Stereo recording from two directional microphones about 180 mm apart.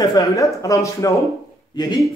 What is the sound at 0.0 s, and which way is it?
Speech, 20° left (ahead or behind).